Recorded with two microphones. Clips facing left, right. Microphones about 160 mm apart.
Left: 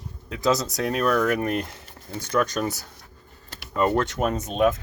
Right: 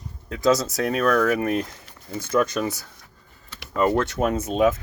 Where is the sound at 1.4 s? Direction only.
Centre (ahead or behind).